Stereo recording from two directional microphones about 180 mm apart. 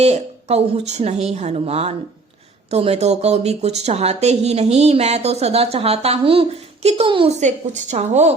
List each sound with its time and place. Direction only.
0.0 s speech: 35° right (ahead or behind)